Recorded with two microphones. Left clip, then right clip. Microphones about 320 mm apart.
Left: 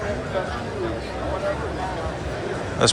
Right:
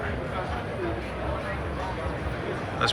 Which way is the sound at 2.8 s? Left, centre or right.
Centre.